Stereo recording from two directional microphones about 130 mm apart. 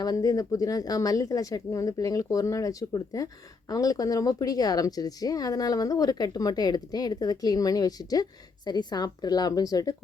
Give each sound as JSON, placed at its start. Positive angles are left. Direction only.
{"t": 0.0, "sound": "a woman's voice", "side_deg": 30}